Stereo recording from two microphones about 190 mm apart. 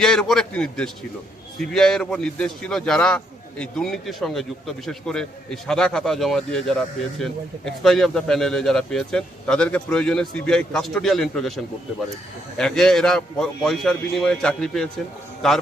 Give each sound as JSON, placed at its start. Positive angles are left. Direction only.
{"t": 0.0, "sound": "a man's voice", "side_deg": 5}